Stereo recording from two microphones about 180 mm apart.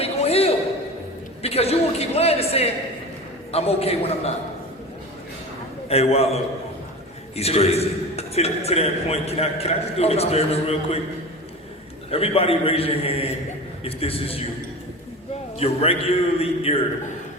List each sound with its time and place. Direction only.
0.0 s a sound: 35° left (ahead or behind)
3.5 s a man's voice: 35° left (ahead or behind)
5.9 s a man's voice: 35° left (ahead or behind)
7.3 s a man's voice: 35° left (ahead or behind)
12.1 s a man's voice: 30° left (ahead or behind)
15.5 s a man's voice: 35° left (ahead or behind)